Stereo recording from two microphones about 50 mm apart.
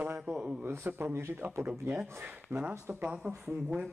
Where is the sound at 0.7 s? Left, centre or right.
Right.